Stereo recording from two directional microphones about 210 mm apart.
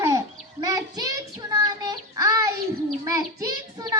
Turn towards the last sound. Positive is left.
turn(degrees=-15)  # may be behind; listen again after turning